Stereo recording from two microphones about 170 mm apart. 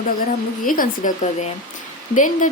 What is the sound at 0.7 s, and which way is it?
Speech, 55° left (ahead or behind).